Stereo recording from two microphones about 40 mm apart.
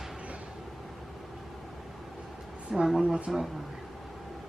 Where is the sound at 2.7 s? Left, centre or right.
Centre.